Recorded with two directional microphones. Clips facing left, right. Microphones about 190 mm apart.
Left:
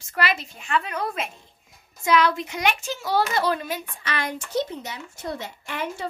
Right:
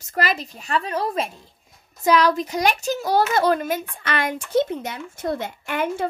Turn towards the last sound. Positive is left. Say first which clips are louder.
# right 6 dB
turn(degrees=-55)  # may be behind; listen again after turning